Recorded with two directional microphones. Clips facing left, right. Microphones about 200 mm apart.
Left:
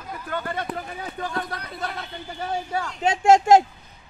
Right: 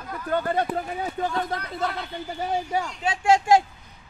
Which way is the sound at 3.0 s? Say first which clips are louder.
Left 5 dB; 45° left (ahead or behind).